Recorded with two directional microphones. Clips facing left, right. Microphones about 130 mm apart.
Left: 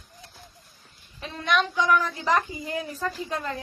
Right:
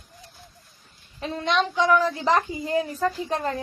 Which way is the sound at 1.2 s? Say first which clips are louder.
Right 2 dB; 30° right (ahead or behind).